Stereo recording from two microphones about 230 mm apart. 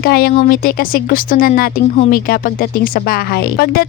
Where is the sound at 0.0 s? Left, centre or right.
Left.